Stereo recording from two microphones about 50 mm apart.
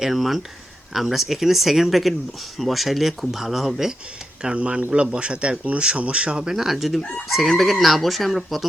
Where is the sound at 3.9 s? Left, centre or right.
Centre.